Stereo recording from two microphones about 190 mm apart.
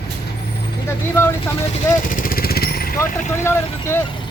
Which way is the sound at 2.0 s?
45° left (ahead or behind).